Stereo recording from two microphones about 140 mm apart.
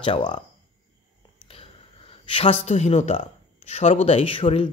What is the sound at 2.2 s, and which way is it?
Speech, 40° left (ahead or behind).